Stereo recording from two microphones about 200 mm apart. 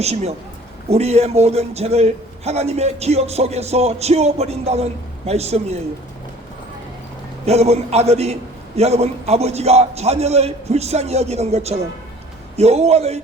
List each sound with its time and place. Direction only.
0.0 s a man's voice: 30° right (ahead or behind)
7.4 s a man's voice: 30° right (ahead or behind)